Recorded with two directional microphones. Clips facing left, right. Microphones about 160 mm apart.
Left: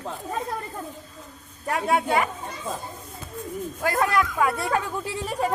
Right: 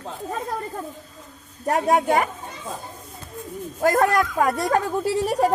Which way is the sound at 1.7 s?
40° right (ahead or behind).